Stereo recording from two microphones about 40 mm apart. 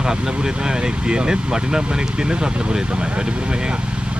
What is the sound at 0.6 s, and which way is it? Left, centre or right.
Speech, right.